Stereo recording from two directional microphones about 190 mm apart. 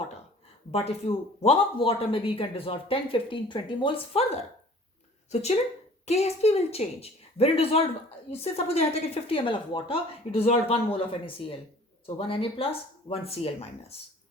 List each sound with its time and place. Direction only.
0.7 s speech: 30° left (ahead or behind)
5.3 s a woman's voice: 35° left (ahead or behind)